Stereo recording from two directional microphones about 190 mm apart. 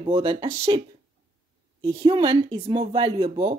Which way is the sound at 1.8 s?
30° right (ahead or behind).